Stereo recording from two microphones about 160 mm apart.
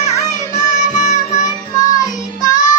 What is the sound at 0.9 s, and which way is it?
Music, 55° left (ahead or behind).